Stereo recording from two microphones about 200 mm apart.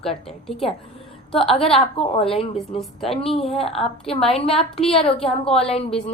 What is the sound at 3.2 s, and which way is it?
Speech, 30° left (ahead or behind).